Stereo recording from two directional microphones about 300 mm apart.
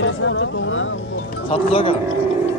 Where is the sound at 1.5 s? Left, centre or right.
Centre.